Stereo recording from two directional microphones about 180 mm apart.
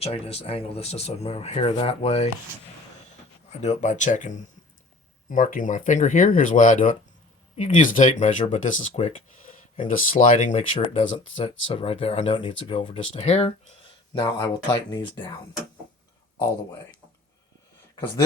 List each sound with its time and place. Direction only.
0.0 s speech: 35° left (ahead or behind)
3.6 s speech: 40° left (ahead or behind)
10.8 s speech: 30° left (ahead or behind)
14.1 s speech: 25° left (ahead or behind)